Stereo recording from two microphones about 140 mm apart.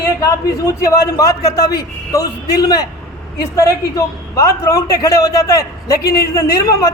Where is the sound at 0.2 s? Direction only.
25° left (ahead or behind).